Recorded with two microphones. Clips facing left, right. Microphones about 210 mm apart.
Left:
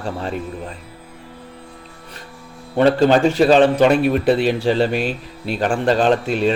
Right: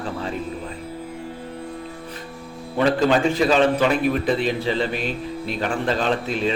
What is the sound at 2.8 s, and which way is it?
Speech, 40° left (ahead or behind).